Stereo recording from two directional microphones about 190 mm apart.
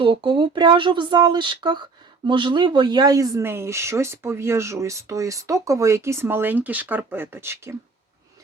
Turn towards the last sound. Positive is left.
turn(degrees=-15)  # may be behind; listen again after turning